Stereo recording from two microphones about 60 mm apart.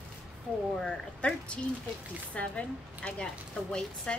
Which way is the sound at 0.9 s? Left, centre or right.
Centre.